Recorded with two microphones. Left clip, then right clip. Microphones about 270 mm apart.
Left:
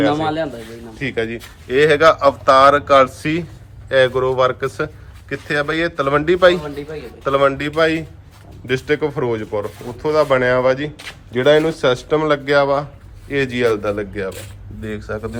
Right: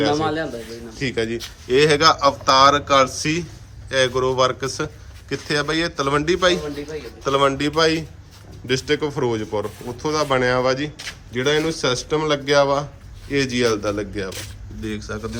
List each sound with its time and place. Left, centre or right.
0.2 s a man's voice: left
0.9 s speech: centre